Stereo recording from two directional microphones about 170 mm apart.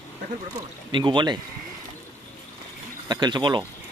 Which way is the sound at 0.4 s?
25° right (ahead or behind).